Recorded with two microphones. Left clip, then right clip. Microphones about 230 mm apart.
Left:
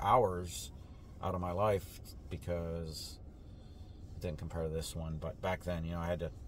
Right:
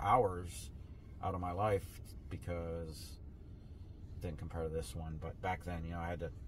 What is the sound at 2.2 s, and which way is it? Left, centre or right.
Speech, centre.